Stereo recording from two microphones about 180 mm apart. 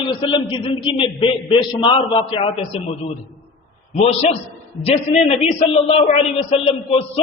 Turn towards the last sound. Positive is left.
turn(degrees=35)  # may be behind; listen again after turning